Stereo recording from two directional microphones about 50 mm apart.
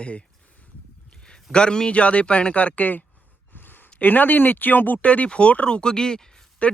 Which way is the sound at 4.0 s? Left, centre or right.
Left.